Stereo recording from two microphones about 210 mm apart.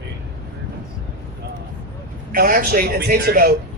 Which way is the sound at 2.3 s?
45° right (ahead or behind).